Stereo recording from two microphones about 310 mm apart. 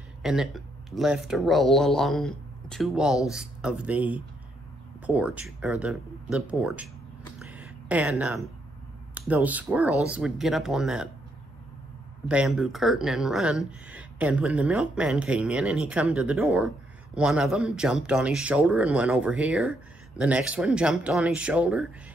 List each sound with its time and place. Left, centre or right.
0.2 s speech: centre
7.3 s a sound: centre
9.1 s speech: centre
12.3 s speech: centre